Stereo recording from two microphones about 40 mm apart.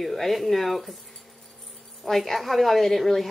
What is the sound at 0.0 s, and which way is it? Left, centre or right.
Speech, centre.